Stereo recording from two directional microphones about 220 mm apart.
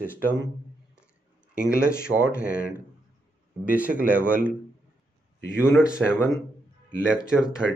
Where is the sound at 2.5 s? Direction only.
40° left (ahead or behind).